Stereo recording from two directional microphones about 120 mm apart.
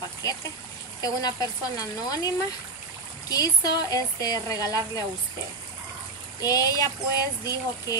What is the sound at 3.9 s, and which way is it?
Speech, 30° left (ahead or behind).